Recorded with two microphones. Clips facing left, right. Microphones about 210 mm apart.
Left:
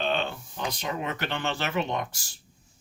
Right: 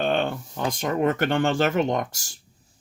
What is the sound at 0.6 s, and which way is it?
Speech, 45° right (ahead or behind).